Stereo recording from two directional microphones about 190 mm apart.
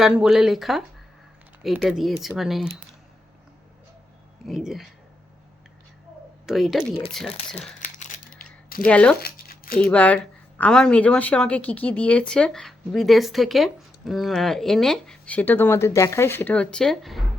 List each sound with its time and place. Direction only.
0.0 s a woman's voice: 5° right (ahead or behind)
4.4 s a woman's voice: centre (ahead or behind)
6.4 s a woman's voice: centre (ahead or behind)
8.9 s speech: 5° left (ahead or behind)
9.2 s a sound: 50° left (ahead or behind)
9.8 s a woman's voice: 5° left (ahead or behind)